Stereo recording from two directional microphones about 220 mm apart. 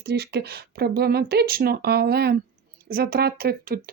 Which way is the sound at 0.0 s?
50° right (ahead or behind).